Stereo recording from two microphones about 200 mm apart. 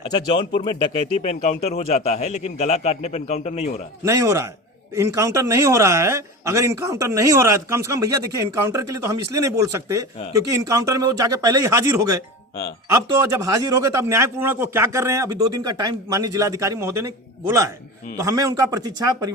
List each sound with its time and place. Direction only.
0.0 s speech: 25° left (ahead or behind)
1.2 s a man's voice: 35° left (ahead or behind)
4.0 s a man's voice: 15° right (ahead or behind)